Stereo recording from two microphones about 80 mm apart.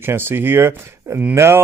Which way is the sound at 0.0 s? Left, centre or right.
Right.